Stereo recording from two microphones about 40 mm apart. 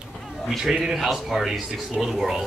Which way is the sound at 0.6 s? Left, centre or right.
Centre.